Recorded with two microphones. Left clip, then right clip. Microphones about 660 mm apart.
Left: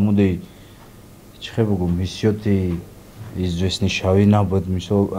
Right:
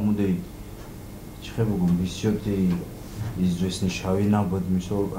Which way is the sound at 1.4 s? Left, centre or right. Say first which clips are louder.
Left 6 dB; left.